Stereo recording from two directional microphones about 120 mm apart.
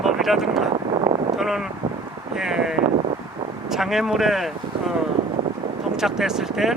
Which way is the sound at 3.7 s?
5° right (ahead or behind).